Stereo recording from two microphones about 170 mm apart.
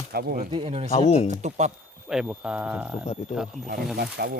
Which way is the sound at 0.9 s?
40° left (ahead or behind).